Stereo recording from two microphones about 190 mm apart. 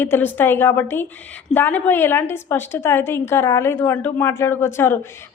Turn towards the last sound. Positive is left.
turn(degrees=10)  # may be behind; listen again after turning